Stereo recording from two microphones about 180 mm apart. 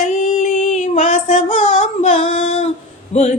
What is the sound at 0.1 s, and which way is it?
Female singing, 40° left (ahead or behind).